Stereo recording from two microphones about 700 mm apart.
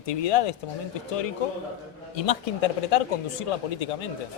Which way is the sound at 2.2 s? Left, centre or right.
Left.